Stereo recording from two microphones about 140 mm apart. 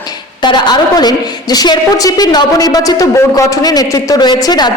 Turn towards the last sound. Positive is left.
turn(degrees=30)  # may be behind; listen again after turning